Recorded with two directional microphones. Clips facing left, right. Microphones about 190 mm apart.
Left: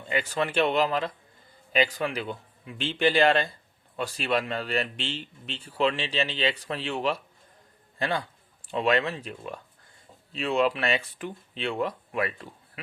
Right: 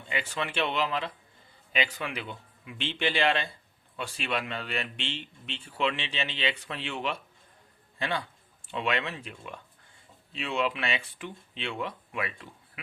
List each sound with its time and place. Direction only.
0.1 s a man's voice: 40° left (ahead or behind)